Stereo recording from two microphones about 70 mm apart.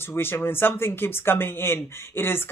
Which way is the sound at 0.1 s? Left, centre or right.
Left.